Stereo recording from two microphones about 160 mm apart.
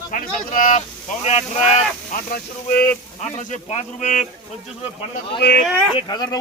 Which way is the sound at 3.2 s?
45° left (ahead or behind).